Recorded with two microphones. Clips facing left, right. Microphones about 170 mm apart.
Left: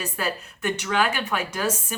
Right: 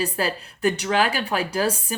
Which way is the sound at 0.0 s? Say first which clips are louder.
Right 4 dB; 35° right (ahead or behind).